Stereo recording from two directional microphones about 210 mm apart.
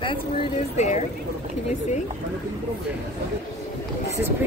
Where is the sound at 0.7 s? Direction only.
35° left (ahead or behind).